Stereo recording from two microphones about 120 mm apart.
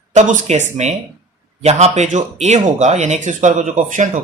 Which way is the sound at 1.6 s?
65° right (ahead or behind).